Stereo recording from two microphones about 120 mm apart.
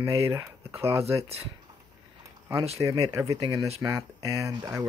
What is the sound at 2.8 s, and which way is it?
Speech, 30° right (ahead or behind).